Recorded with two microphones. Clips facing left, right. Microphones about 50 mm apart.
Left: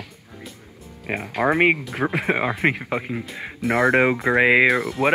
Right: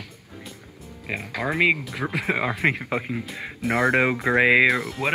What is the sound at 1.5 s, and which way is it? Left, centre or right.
Speech, left.